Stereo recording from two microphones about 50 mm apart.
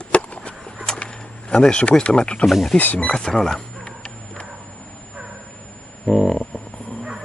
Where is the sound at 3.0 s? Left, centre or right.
Centre.